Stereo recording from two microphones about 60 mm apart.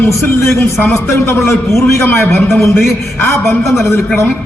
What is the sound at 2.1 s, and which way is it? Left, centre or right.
Speech, left.